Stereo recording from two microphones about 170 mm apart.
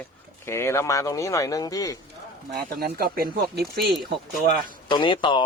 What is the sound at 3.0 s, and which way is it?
Speech, 65° right (ahead or behind).